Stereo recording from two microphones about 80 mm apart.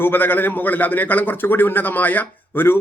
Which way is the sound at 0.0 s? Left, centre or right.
Left.